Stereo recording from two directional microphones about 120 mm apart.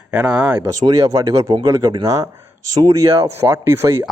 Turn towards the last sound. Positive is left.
turn(degrees=-20)  # may be behind; listen again after turning